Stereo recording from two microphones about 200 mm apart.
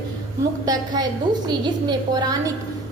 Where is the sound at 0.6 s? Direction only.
20° right (ahead or behind).